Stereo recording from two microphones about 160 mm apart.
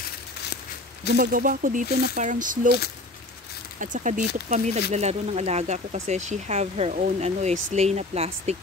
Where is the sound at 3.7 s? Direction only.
55° right (ahead or behind).